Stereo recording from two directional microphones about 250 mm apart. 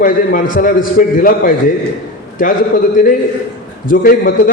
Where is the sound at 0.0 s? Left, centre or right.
Left.